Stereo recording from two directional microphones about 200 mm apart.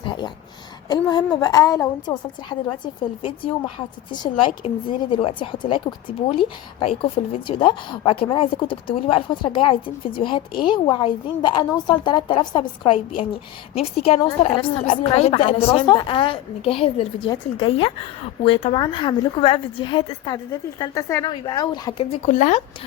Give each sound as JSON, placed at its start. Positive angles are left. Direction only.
{"t": 0.0, "sound": "a sound", "side_deg": 25}
{"t": 0.9, "sound": "a woman's voice", "side_deg": 20}
{"t": 22.3, "sound": "a woman's voice", "side_deg": 40}